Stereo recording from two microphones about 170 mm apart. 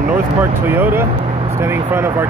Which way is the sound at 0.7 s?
10° right (ahead or behind).